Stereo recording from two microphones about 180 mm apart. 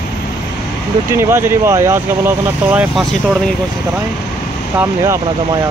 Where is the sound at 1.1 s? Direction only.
15° right (ahead or behind).